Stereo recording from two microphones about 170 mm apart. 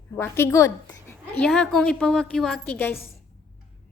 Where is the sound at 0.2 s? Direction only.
15° left (ahead or behind).